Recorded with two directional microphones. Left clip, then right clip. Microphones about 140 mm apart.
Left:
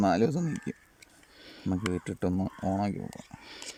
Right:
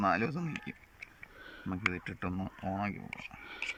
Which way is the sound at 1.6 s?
55° left (ahead or behind).